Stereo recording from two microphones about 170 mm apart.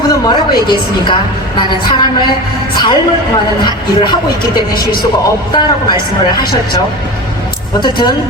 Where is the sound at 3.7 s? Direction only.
25° left (ahead or behind).